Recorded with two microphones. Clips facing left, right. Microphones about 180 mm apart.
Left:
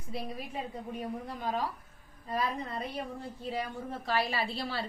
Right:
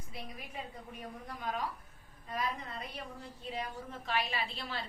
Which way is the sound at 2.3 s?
35° left (ahead or behind).